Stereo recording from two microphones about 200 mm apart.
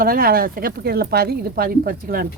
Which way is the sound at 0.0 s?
45° right (ahead or behind).